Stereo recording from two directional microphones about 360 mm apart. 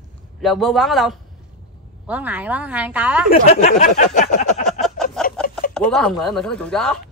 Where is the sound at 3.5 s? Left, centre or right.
Centre.